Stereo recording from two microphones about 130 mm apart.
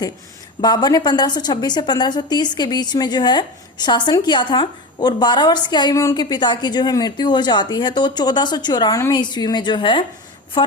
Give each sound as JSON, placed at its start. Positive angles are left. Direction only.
{"t": 0.6, "sound": "a woman's voice", "side_deg": 35}